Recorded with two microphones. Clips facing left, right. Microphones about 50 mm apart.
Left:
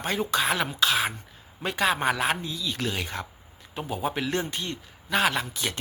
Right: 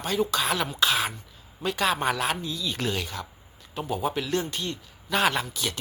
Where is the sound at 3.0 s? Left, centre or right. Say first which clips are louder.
Left 2 dB; left.